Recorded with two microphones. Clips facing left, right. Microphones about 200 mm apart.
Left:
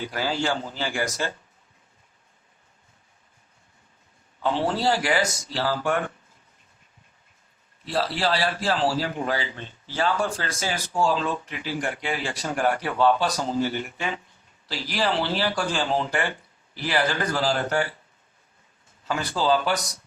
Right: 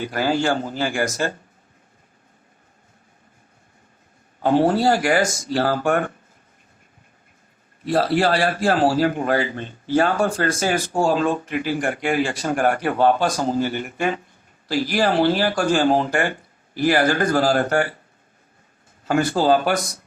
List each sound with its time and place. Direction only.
0.0 s a man's voice: 50° right (ahead or behind)
4.4 s a man's voice: 45° right (ahead or behind)
7.9 s a man's voice: 50° right (ahead or behind)
19.0 s a man's voice: 50° right (ahead or behind)